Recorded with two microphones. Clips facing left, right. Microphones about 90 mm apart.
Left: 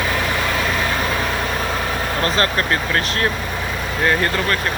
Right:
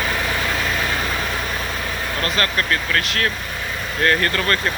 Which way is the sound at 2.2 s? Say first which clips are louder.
Left 2 dB; 30° left (ahead or behind).